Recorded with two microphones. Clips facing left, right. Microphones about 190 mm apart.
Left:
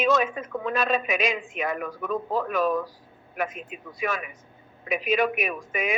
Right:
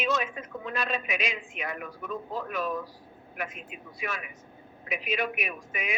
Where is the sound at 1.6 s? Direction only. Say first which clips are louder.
Left 7 dB; 90° left.